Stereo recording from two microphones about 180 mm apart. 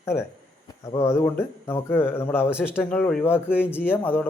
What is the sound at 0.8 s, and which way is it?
A man's voice, 15° left (ahead or behind).